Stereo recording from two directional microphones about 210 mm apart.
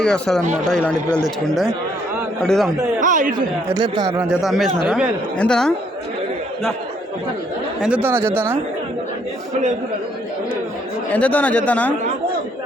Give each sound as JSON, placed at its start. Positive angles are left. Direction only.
{"t": 0.0, "sound": "speech", "side_deg": 5}
{"t": 3.0, "sound": "a man's voice", "side_deg": -40}
{"t": 3.8, "sound": "a man's voice", "side_deg": -20}
{"t": 4.3, "sound": "speech", "side_deg": 0}
{"t": 7.8, "sound": "speech", "side_deg": -5}
{"t": 11.1, "sound": "speech", "side_deg": 5}